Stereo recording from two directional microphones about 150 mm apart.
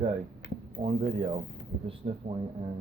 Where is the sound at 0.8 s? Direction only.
40° right (ahead or behind).